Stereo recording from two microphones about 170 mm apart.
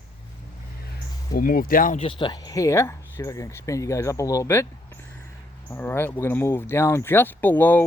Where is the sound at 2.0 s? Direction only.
30° left (ahead or behind).